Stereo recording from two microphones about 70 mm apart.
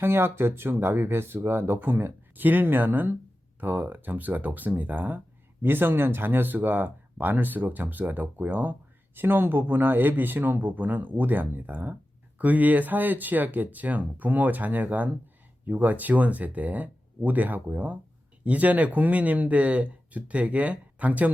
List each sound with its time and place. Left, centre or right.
0.0 s speech: right